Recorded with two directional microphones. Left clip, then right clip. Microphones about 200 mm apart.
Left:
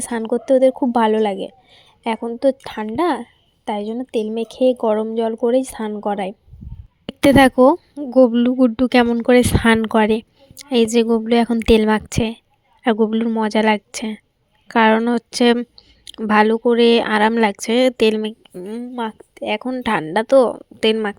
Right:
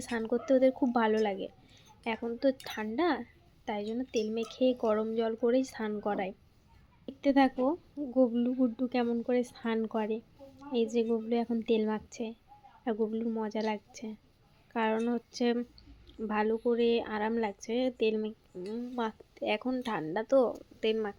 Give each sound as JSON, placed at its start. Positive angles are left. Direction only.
{"t": 0.0, "sound": "a woman's voice", "side_deg": 40}
{"t": 7.1, "sound": "speech", "side_deg": 60}